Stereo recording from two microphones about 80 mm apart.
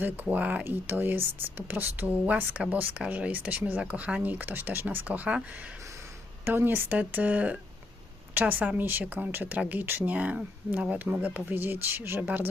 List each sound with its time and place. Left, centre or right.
0.0 s a woman's voice: centre
6.4 s a woman's voice: right